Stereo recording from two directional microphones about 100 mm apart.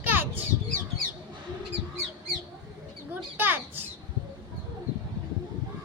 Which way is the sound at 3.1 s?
20° right (ahead or behind).